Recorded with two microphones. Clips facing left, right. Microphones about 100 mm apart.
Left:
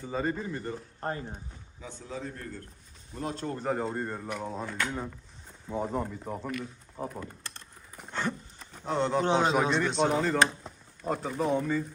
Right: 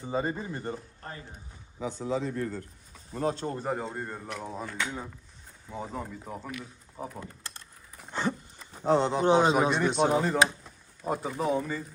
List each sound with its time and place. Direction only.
0.0 s speech: 15° right (ahead or behind)
1.8 s speech: 90° right
3.1 s speech: 35° right (ahead or behind)
3.5 s speech: 5° right (ahead or behind)
8.1 s a sound: 10° right (ahead or behind)
8.8 s a man's voice: 30° right (ahead or behind)
9.0 s speech: 10° right (ahead or behind)